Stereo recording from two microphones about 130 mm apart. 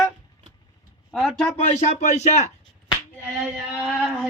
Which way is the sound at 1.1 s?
Centre (ahead or behind).